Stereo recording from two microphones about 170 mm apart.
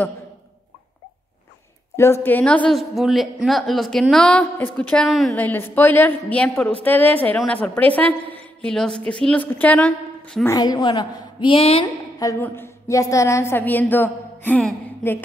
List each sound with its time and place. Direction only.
2.0 s a woman's voice: 15° left (ahead or behind)
10.4 s a woman's voice: 20° left (ahead or behind)
12.2 s a woman's voice: 15° left (ahead or behind)